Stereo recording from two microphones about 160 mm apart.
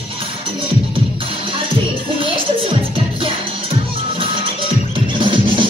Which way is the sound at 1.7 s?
30° right (ahead or behind).